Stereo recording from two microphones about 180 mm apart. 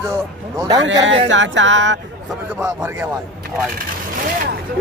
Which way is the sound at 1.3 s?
90° right.